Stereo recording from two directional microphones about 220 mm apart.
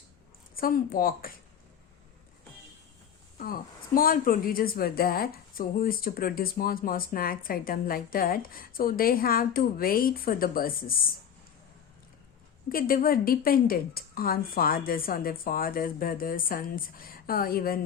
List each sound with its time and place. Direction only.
0.5 s speech: 40° left (ahead or behind)
3.3 s speech: 40° left (ahead or behind)
12.6 s speech: 40° left (ahead or behind)